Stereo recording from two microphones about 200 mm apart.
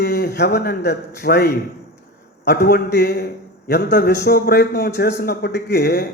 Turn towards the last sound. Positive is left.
turn(degrees=55)  # may be behind; listen again after turning